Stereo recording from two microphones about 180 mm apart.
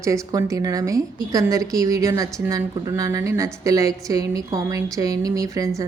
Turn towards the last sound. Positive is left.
turn(degrees=-20)  # may be behind; listen again after turning